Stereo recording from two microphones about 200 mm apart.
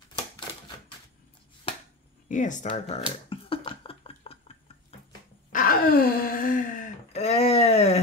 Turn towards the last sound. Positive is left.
turn(degrees=30)  # may be behind; listen again after turning